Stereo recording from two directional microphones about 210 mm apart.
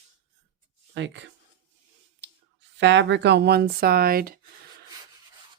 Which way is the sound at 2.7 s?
60° right (ahead or behind).